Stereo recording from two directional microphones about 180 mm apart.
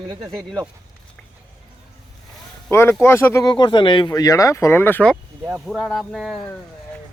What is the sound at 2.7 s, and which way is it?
Speech, 15° left (ahead or behind).